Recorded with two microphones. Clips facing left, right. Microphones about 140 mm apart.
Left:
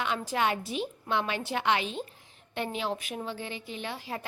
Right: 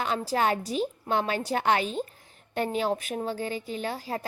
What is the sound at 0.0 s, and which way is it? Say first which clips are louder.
A woman's voice: right 3 dB; 40° right (ahead or behind).